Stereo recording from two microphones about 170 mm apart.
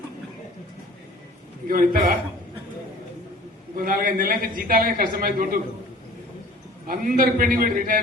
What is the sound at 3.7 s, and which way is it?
A man's voice, 55° right (ahead or behind).